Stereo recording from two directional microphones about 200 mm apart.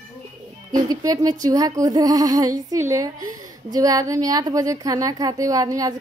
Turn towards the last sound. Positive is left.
turn(degrees=-20)  # may be behind; listen again after turning